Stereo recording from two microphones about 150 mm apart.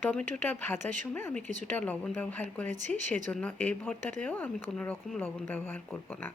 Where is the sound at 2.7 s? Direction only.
55° right (ahead or behind).